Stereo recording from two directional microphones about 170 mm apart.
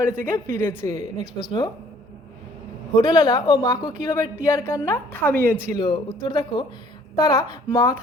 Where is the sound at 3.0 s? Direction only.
25° left (ahead or behind).